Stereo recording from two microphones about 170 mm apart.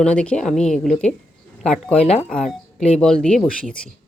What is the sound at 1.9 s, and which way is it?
Speech, 40° left (ahead or behind).